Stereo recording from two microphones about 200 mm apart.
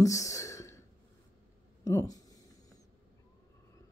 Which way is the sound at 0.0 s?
15° left (ahead or behind).